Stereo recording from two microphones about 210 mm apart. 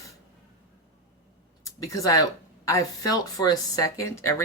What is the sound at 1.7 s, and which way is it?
Speech, 15° left (ahead or behind).